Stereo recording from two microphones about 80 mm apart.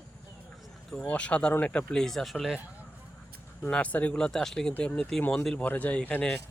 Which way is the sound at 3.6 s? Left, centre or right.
Centre.